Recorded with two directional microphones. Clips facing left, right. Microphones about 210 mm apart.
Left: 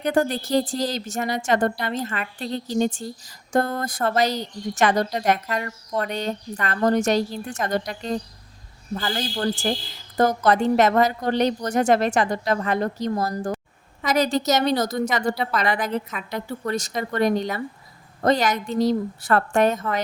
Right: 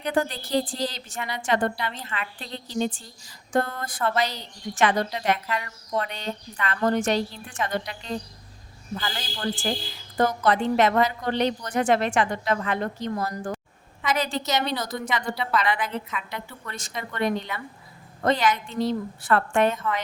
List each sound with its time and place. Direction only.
0.0 s a woman's voice: 45° left (ahead or behind)